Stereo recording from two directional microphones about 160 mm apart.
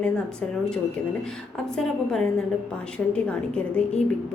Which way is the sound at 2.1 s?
5° left (ahead or behind).